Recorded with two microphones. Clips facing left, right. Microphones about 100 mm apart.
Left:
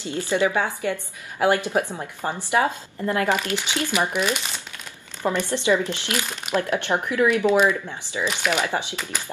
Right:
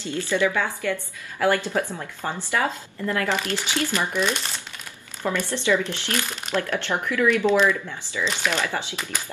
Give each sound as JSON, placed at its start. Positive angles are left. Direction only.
{"t": 0.0, "sound": "speech", "side_deg": 20}
{"t": 4.2, "sound": "speech", "side_deg": 5}
{"t": 5.2, "sound": "speech", "side_deg": 15}